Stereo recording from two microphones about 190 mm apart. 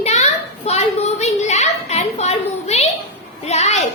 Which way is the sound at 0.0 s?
35° left (ahead or behind).